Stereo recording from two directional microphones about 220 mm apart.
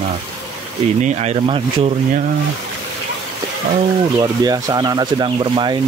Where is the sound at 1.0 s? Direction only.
30° right (ahead or behind).